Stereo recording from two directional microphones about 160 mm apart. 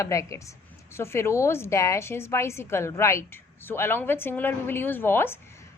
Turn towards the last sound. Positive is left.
turn(degrees=15)  # may be behind; listen again after turning